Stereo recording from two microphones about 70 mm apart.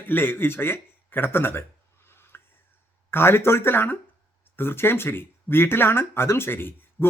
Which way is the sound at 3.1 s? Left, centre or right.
Left.